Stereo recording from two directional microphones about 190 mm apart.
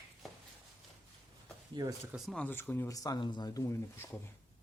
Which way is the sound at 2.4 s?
10° left (ahead or behind).